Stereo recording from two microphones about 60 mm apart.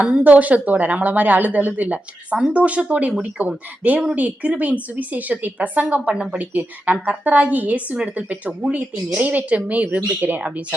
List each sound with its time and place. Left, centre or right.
0.3 s a woman's voice: right
6.5 s speech: right